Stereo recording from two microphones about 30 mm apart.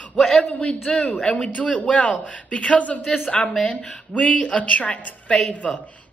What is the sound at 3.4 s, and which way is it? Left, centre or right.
Speech, centre.